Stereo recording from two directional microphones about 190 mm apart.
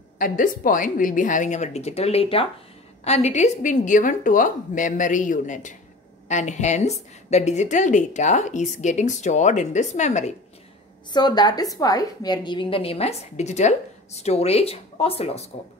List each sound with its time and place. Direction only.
0.2 s a woman's voice: 45° left (ahead or behind)
11.1 s a woman's voice: 20° left (ahead or behind)